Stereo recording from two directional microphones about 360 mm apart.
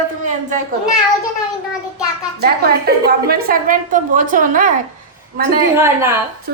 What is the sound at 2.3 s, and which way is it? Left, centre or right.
A woman's voice, right.